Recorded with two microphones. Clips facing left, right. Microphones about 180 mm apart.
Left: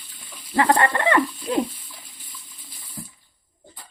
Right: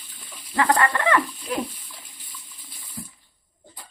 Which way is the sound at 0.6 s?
30° left (ahead or behind).